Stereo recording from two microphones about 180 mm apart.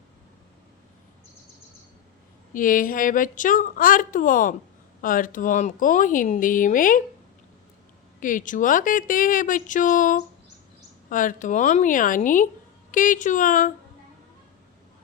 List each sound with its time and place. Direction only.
2.5 s a woman's voice: 50° left (ahead or behind)
8.2 s a woman's voice: 45° left (ahead or behind)